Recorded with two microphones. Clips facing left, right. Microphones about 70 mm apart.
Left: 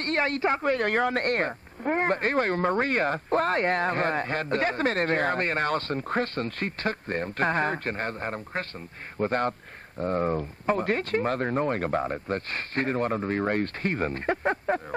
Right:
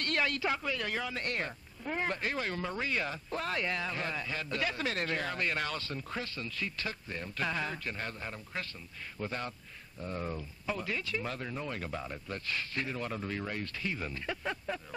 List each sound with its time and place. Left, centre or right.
0.0 s speech: left